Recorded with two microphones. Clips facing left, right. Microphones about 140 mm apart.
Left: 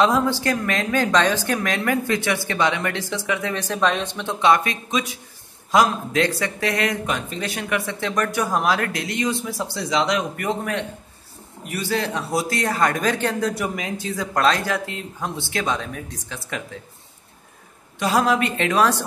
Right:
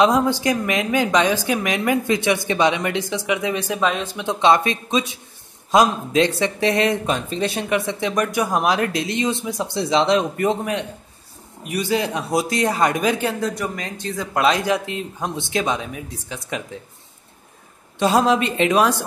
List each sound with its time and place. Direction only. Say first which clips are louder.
0.0 s speech: right 2 dB; 15° right (ahead or behind)
4.3 s speech: right 2 dB; 25° right (ahead or behind); by 14.4 s centre (ahead or behind)
14.4 s speech: right 2 dB; 15° right (ahead or behind)
17.9 s speech: right 3 dB; 25° right (ahead or behind)